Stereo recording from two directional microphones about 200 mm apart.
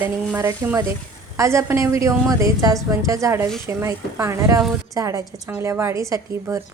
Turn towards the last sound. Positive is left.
turn(degrees=-15)  # may be behind; listen again after turning